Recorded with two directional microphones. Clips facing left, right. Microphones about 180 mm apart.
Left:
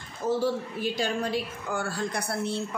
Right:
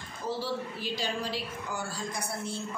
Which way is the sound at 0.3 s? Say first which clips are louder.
Left 7 dB; 50° left (ahead or behind).